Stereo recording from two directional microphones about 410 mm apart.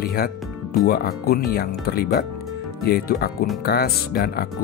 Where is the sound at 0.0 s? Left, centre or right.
Left.